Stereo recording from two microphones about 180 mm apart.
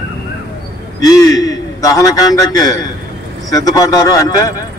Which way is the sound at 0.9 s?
20° left (ahead or behind).